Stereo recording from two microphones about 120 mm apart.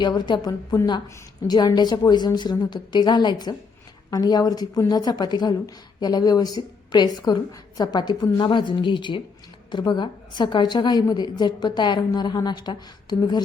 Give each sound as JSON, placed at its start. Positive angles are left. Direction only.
{"t": 0.0, "sound": "a woman's voice", "side_deg": 35}